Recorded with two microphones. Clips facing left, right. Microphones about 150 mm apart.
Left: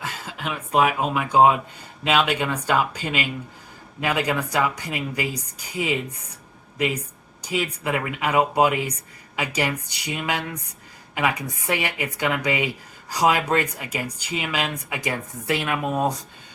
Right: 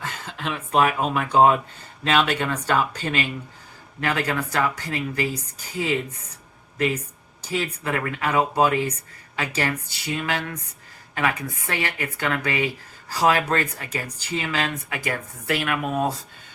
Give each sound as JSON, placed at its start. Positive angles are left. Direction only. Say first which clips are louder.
{"t": 0.0, "sound": "a woman's voice", "louder": "even", "side_deg": 10}